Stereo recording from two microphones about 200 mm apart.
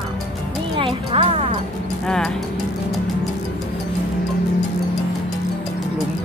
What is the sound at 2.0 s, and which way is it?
Speech, 5° left (ahead or behind).